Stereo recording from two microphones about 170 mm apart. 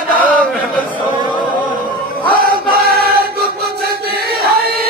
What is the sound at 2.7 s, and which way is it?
Choir, 65° right (ahead or behind).